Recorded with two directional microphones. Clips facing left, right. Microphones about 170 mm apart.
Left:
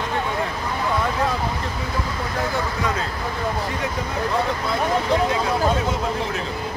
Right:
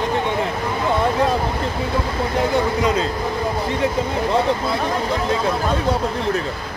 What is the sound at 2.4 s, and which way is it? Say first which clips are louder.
Speech: right 6 dB; 20° right (ahead or behind).